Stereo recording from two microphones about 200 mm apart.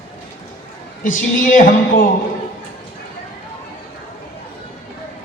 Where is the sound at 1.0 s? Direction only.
40° left (ahead or behind).